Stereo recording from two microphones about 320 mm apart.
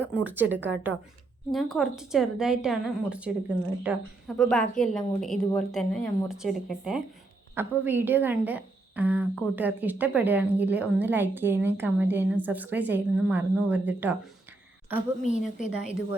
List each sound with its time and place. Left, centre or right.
0.1 s a woman's voice: centre
0.5 s a woman's voice: right
1.5 s a woman's voice: centre
15.2 s a woman's voice: left
15.7 s a woman's voice: centre